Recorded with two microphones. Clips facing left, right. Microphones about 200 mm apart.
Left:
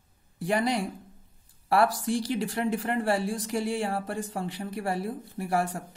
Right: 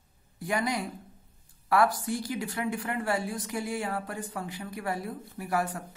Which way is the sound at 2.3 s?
35° left (ahead or behind).